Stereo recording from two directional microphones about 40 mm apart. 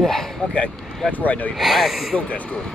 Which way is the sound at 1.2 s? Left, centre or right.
Left.